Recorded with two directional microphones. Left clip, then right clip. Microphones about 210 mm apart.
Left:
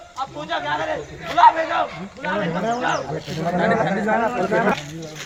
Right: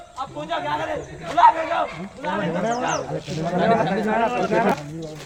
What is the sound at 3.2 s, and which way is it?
Speech, 20° left (ahead or behind).